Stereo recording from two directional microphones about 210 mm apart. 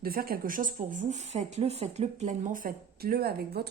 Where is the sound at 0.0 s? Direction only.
45° right (ahead or behind).